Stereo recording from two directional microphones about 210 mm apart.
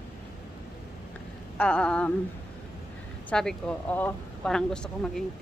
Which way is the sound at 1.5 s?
5° left (ahead or behind).